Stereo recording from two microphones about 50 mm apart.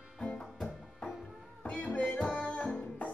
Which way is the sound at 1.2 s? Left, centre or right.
Centre.